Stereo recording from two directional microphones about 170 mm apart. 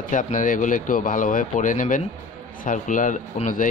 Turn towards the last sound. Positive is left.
turn(degrees=50)  # may be behind; listen again after turning